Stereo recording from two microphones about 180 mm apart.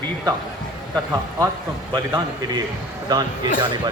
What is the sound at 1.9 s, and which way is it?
Speech, 25° right (ahead or behind).